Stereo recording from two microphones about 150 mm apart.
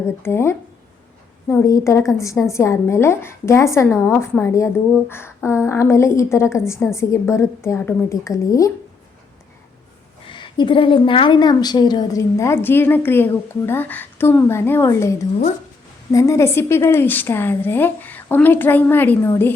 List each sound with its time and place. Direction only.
0.2 s a woman's voice: 15° left (ahead or behind)
1.6 s a woman's voice: 20° left (ahead or behind)
10.2 s a woman's voice: 30° left (ahead or behind); by 19.5 s 15° left (ahead or behind)